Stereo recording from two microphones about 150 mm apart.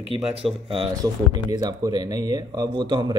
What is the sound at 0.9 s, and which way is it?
Speech, 25° right (ahead or behind).